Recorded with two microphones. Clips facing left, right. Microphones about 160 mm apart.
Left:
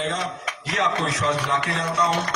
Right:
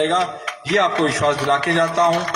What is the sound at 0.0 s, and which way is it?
A man's voice, 75° right (ahead or behind).